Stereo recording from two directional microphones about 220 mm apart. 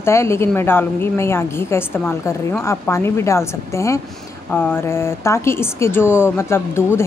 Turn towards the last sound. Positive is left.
turn(degrees=10)  # may be behind; listen again after turning